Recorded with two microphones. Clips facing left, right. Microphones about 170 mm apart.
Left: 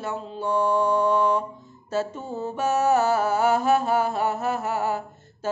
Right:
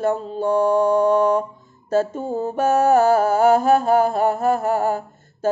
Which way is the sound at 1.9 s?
45° right (ahead or behind).